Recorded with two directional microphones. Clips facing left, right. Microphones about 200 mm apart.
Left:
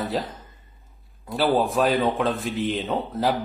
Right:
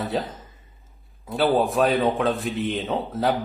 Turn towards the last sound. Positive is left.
turn(degrees=0)  # may be behind; listen again after turning